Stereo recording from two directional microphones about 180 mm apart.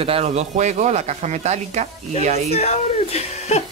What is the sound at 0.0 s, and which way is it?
Speech, 35° right (ahead or behind).